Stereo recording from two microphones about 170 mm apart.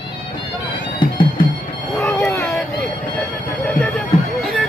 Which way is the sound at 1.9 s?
15° left (ahead or behind).